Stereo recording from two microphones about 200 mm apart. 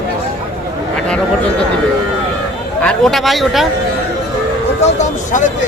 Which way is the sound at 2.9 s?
Centre (ahead or behind).